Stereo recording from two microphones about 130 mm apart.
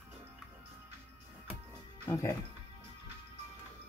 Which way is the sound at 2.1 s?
25° left (ahead or behind).